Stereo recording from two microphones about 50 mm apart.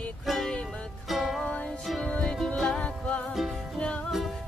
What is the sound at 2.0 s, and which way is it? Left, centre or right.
Music, centre.